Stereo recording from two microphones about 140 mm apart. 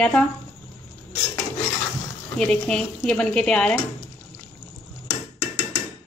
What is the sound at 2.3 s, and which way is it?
A woman's voice, 5° left (ahead or behind).